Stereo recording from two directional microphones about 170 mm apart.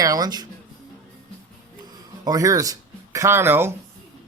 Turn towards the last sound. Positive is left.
turn(degrees=-15)  # may be behind; listen again after turning